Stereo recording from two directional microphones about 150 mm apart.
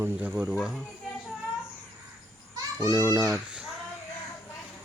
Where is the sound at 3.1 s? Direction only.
5° right (ahead or behind).